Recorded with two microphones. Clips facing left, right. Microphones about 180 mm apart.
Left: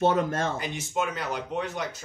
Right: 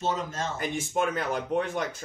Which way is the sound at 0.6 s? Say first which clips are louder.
Right 2 dB; 50° right (ahead or behind).